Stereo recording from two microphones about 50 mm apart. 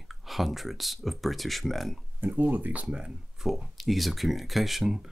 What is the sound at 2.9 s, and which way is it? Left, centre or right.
Speech, centre.